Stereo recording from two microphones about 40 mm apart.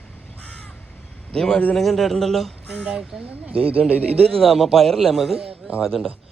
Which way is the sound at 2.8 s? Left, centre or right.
Centre.